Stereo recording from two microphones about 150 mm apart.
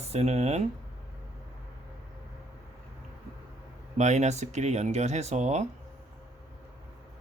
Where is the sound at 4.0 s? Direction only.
50° right (ahead or behind).